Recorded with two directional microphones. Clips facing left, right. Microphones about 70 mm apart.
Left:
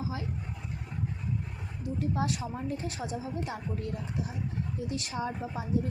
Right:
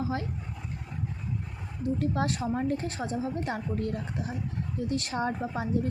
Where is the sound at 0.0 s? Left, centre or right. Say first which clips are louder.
Right 5 dB; right.